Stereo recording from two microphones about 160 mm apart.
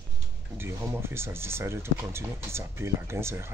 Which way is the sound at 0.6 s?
15° right (ahead or behind).